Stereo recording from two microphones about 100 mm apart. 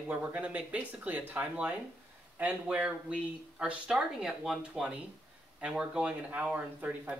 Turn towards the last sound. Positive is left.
turn(degrees=-15)  # may be behind; listen again after turning